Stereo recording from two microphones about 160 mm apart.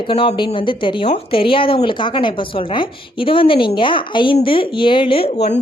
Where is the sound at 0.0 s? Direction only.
35° left (ahead or behind).